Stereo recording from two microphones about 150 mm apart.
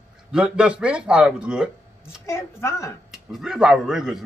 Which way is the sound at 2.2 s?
20° left (ahead or behind).